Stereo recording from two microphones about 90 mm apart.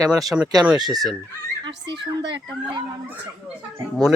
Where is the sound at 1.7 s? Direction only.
60° right (ahead or behind).